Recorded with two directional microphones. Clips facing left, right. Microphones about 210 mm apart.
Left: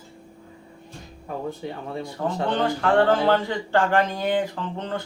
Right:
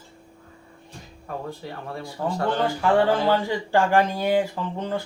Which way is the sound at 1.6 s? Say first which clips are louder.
Left 3 dB; 20° left (ahead or behind).